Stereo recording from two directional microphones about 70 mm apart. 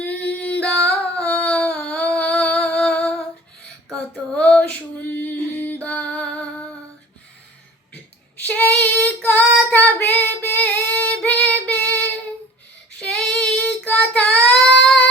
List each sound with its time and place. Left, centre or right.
0.0 s a sound: left
2.6 s music: centre
4.4 s music: centre
5.9 s music: centre
8.4 s female singing: left
13.0 s child singing: centre